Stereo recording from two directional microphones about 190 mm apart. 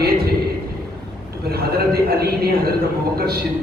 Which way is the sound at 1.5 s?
55° right (ahead or behind).